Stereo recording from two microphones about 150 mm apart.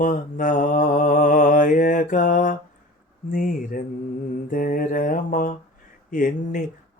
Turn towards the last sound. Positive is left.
turn(degrees=65)  # may be behind; listen again after turning